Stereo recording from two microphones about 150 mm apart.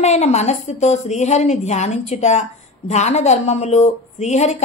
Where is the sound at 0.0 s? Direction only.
50° left (ahead or behind).